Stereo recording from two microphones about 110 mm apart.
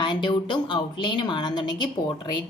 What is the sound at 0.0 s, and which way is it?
A woman's voice, 45° left (ahead or behind).